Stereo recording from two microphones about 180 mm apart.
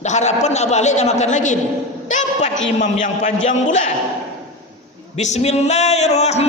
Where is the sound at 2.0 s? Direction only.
40° left (ahead or behind).